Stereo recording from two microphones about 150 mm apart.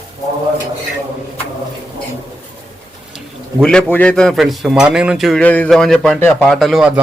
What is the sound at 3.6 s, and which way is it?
A man's voice, 5° left (ahead or behind).